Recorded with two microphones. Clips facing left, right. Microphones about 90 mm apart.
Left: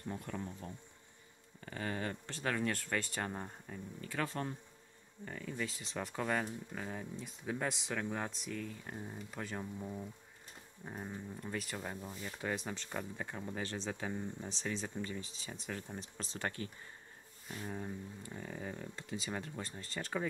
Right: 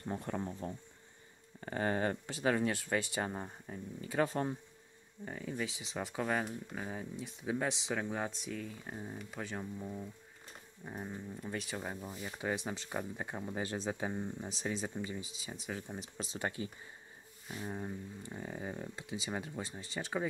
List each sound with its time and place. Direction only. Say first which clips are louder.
0.0 s speech: right 4 dB; 35° right (ahead or behind)
2.2 s speech: right 1 dB; 5° right (ahead or behind)
3.6 s speech: right 2 dB; 20° right (ahead or behind)
14.5 s speech: right 2 dB; 5° right (ahead or behind)